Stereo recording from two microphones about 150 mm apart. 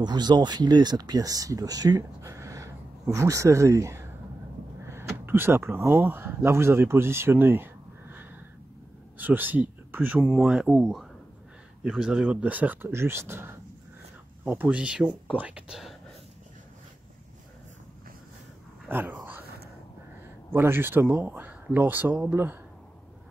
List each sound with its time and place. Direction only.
0.0 s speech: 30° right (ahead or behind); by 16.0 s 5° right (ahead or behind)
18.9 s dog: 10° right (ahead or behind)
20.5 s speech: 15° right (ahead or behind)